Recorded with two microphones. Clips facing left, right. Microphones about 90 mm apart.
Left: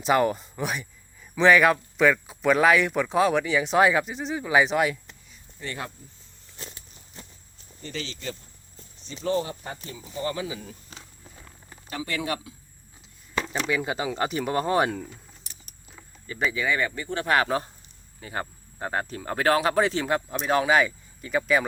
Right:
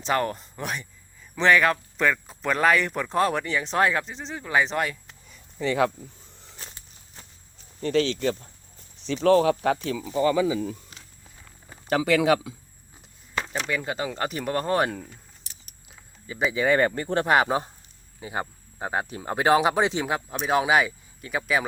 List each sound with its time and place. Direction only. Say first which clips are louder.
0.0 s speech: left 3 dB; 10° left (ahead or behind)
7.8 s speech: right 13 dB; 60° right (ahead or behind)
9.0 s speech: right 8 dB; 90° right
11.9 s speech: right 10 dB; 90° right
13.5 s speech: left 2 dB; 5° left (ahead or behind)
16.2 s speech: right 1 dB; 15° right (ahead or behind)
16.6 s speech: right 9 dB; 40° right (ahead or behind)
17.2 s speech: right 1 dB; 20° right (ahead or behind)
20.1 s speech: left 1 dB; 5° right (ahead or behind)